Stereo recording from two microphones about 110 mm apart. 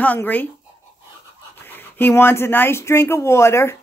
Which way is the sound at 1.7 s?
20° left (ahead or behind).